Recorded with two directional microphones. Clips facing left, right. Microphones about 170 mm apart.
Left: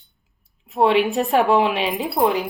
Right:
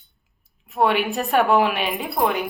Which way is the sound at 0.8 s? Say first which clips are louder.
Left 3 dB; 25° left (ahead or behind).